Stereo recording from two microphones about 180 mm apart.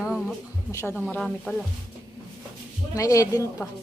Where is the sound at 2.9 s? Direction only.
15° left (ahead or behind).